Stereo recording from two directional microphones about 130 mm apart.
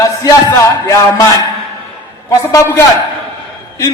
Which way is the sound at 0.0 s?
25° left (ahead or behind).